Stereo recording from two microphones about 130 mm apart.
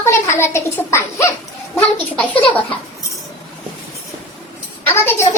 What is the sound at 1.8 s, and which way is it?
Speech, 10° left (ahead or behind).